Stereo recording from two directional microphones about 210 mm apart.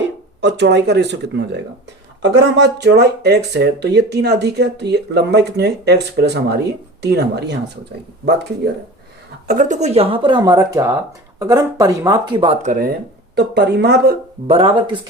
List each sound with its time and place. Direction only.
0.4 s speech: 55° right (ahead or behind)
9.5 s speech: 35° right (ahead or behind)
12.6 s speech: 45° right (ahead or behind)
14.4 s speech: 25° right (ahead or behind)